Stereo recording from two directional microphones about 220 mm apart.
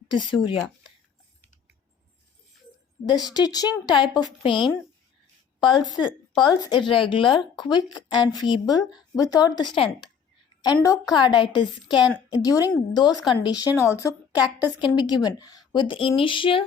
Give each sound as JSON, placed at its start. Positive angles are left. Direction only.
{"t": 0.1, "sound": "speech", "side_deg": 20}
{"t": 3.2, "sound": "speech", "side_deg": 15}
{"t": 5.5, "sound": "a woman's voice", "side_deg": 20}